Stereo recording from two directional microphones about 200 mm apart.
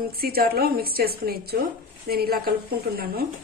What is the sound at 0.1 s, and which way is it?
A woman's voice, 50° right (ahead or behind).